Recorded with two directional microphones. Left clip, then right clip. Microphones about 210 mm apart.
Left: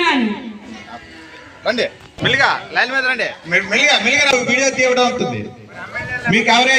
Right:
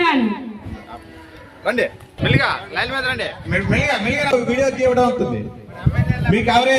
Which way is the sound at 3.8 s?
45° right (ahead or behind).